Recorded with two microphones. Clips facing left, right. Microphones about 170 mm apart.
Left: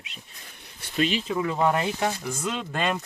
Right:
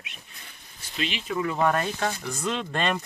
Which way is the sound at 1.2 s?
20° left (ahead or behind).